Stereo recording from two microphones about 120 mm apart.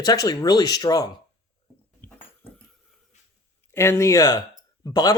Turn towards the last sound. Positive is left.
turn(degrees=30)  # may be behind; listen again after turning